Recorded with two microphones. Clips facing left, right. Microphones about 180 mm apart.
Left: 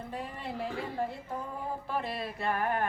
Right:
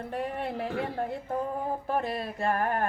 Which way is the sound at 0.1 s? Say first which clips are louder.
Right 8 dB; 65° right (ahead or behind).